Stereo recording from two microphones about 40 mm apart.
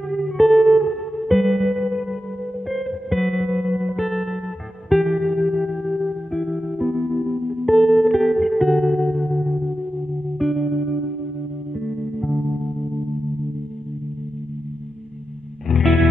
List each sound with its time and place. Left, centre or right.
0.1 s music: centre
15.7 s music: centre